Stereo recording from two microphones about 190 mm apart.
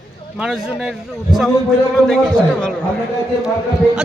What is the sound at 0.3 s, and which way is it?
A man's voice, 5° right (ahead or behind).